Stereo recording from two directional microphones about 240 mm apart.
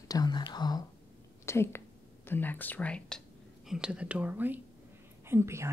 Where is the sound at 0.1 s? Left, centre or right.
Centre.